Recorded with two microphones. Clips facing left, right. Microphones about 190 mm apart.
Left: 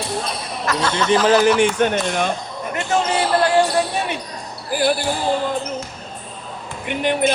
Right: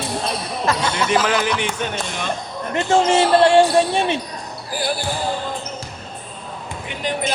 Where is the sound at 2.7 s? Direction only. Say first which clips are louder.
Right 4 dB; 30° right (ahead or behind).